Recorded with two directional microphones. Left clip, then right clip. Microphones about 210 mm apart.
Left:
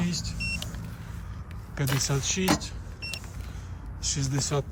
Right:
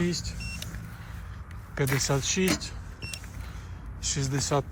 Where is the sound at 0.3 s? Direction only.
50° left (ahead or behind).